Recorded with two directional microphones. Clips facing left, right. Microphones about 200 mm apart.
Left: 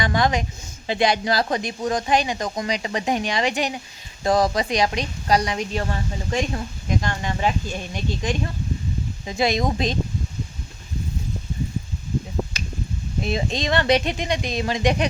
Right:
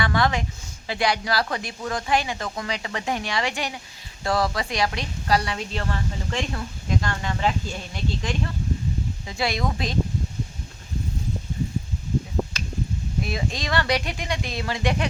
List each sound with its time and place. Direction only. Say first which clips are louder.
0.0 s a woman's voice: left 2 dB; 20° left (ahead or behind)
13.2 s a woman's voice: left 8 dB; 25° left (ahead or behind)